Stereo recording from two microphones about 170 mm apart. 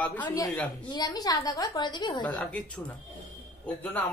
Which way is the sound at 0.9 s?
25° left (ahead or behind).